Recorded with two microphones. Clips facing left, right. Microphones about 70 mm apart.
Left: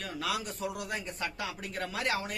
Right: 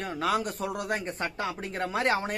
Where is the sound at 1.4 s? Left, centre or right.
Right.